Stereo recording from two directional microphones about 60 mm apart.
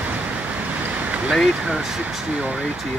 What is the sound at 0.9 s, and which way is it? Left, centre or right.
Vehicle, right.